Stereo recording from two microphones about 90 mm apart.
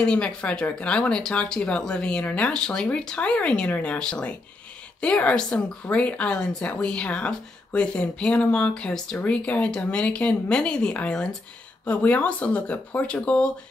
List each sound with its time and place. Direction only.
0.0 s a woman's voice: 10° left (ahead or behind)